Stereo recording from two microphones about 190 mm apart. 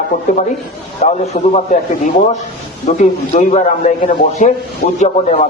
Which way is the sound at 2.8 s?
40° left (ahead or behind).